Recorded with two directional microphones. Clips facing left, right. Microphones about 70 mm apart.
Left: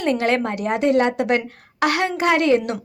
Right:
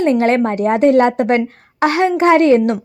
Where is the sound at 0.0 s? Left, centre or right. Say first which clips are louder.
Right 6 dB; right.